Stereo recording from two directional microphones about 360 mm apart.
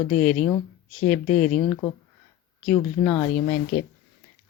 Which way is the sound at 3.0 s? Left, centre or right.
Centre.